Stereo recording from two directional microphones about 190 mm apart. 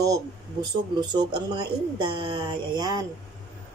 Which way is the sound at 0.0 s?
20° right (ahead or behind).